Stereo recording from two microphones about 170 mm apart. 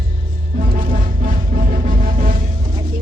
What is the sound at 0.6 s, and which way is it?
Music, 55° right (ahead or behind).